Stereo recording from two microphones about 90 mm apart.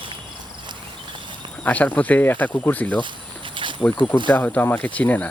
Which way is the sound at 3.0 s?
65° right (ahead or behind).